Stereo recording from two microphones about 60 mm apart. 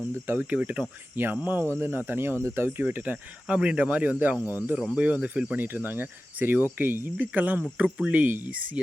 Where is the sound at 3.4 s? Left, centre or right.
Centre.